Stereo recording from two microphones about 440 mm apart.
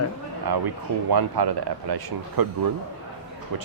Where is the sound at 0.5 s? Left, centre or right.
Right.